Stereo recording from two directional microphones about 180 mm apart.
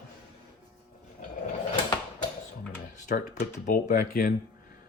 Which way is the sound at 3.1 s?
40° left (ahead or behind).